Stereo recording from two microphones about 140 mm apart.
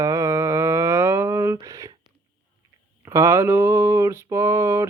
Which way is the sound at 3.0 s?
20° right (ahead or behind).